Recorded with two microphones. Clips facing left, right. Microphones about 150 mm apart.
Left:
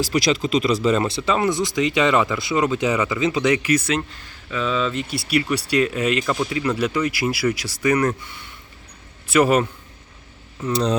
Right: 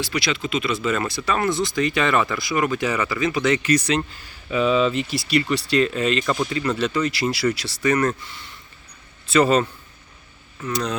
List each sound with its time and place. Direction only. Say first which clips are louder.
0.0 s speech: left 5 dB; 40° left (ahead or behind); by 4.2 s 5° left (ahead or behind)
4.4 s speech: right 4 dB; 10° right (ahead or behind); by 9.6 s 10° left (ahead or behind)
10.7 s speech: left 4 dB; 30° left (ahead or behind)